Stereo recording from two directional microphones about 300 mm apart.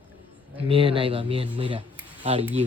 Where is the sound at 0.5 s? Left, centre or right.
Centre.